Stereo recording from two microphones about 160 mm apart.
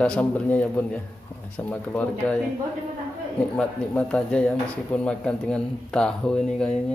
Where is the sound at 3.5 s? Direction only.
5° left (ahead or behind).